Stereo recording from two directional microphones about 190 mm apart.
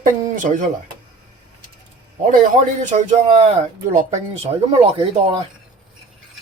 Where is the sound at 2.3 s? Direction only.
45° right (ahead or behind).